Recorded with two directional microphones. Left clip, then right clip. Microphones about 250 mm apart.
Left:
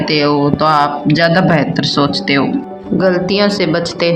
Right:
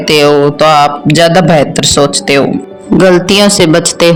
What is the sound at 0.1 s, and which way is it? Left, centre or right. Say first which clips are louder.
A woman's voice: right 8 dB; right.